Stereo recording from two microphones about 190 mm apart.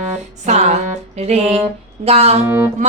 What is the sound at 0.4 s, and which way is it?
Music, 35° right (ahead or behind).